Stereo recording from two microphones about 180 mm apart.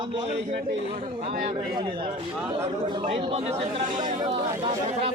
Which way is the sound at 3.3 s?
35° right (ahead or behind).